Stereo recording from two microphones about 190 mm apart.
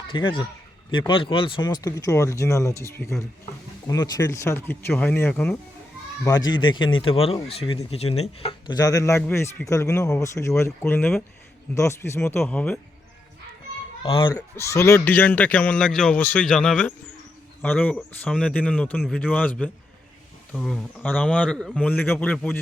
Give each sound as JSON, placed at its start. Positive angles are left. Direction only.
{"t": 0.1, "sound": "a man's voice", "side_deg": 25}
{"t": 6.2, "sound": "a man's voice", "side_deg": 20}
{"t": 14.0, "sound": "speech", "side_deg": 30}
{"t": 14.3, "sound": "a man's voice", "side_deg": 15}